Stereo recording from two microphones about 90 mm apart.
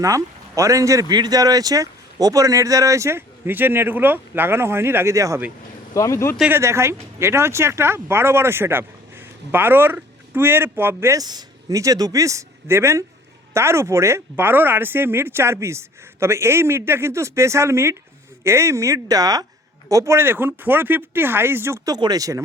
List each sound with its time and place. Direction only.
0.0 s speech: 35° right (ahead or behind)
1.1 s speech: 50° right (ahead or behind)
5.9 s speech: 35° left (ahead or behind)
6.5 s speech: 30° right (ahead or behind)
11.2 s speech: 45° right (ahead or behind); by 21.8 s 25° right (ahead or behind)
21.8 s speech: 50° right (ahead or behind)